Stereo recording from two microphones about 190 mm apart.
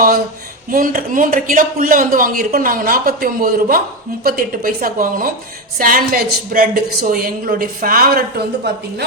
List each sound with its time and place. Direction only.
0.7 s speech: 45° right (ahead or behind)
8.7 s speech: 65° right (ahead or behind)